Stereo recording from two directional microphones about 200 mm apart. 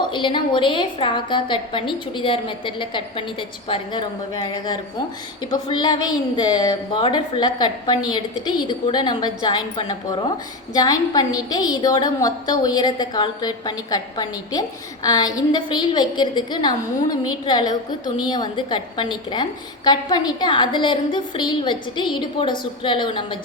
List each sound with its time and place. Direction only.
0.0 s a woman's voice: 25° left (ahead or behind)